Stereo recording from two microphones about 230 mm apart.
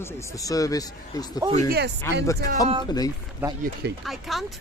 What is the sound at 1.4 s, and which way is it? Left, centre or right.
Speech, right.